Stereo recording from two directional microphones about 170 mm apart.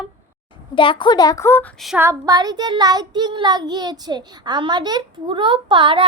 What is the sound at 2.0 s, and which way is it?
Child singing, 15° right (ahead or behind).